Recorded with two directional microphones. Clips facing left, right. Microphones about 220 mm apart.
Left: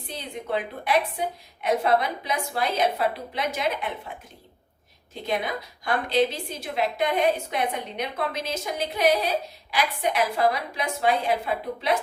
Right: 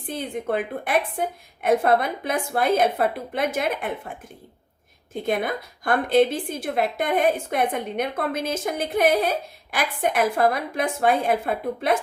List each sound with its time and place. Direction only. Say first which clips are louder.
0.1 s a woman's voice: right 4 dB; 50° right (ahead or behind)
5.2 s a woman's voice: right 3 dB; 50° right (ahead or behind)